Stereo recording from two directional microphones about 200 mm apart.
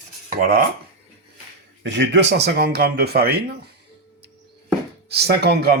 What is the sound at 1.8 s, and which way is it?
Speech, 60° right (ahead or behind).